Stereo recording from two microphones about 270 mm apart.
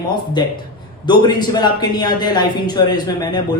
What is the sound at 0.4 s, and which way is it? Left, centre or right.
Speech, centre.